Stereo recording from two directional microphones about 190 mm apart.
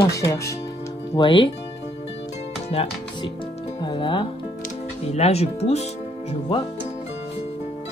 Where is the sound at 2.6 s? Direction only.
30° left (ahead or behind).